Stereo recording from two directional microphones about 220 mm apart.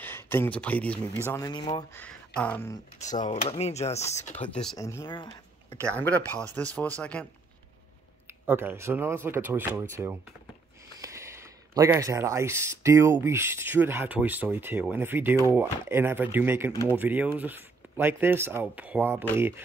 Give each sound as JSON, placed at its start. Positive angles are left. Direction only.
{"t": 0.0, "sound": "speech", "side_deg": 10}
{"t": 2.0, "sound": "speech", "side_deg": 5}
{"t": 3.3, "sound": "speech", "side_deg": 30}
{"t": 4.5, "sound": "speech", "side_deg": 5}
{"t": 4.7, "sound": "speech", "side_deg": 15}
{"t": 5.7, "sound": "speech", "side_deg": 5}
{"t": 8.5, "sound": "speech", "side_deg": -10}